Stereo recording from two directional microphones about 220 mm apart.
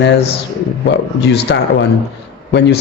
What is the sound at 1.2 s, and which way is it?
Speech, 50° left (ahead or behind).